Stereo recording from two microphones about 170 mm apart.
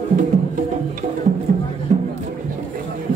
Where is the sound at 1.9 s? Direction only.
45° right (ahead or behind).